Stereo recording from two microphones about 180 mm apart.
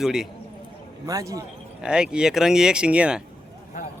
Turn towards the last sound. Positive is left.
turn(degrees=-5)  # may be behind; listen again after turning